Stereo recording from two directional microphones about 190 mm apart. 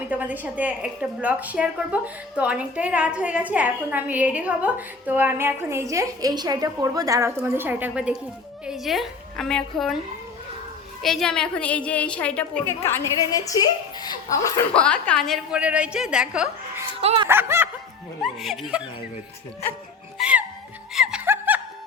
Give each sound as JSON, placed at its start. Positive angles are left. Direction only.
{"t": 0.1, "sound": "a woman's voice", "side_deg": -10}
{"t": 11.0, "sound": "a woman's voice", "side_deg": 0}
{"t": 14.7, "sound": "a woman's voice", "side_deg": 5}
{"t": 15.5, "sound": "a woman's voice", "side_deg": -5}
{"t": 17.0, "sound": "speech", "side_deg": -30}
{"t": 17.2, "sound": "a woman's voice", "side_deg": -10}
{"t": 18.2, "sound": "a woman's voice", "side_deg": 0}
{"t": 20.1, "sound": "music", "side_deg": -5}